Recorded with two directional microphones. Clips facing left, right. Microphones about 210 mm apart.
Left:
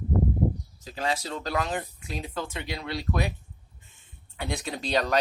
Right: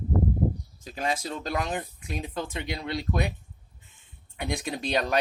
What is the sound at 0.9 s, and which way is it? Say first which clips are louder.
Speech: even; 15° right (ahead or behind).